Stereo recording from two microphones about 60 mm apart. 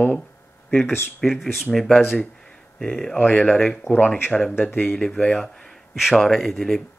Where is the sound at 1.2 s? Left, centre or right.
Centre.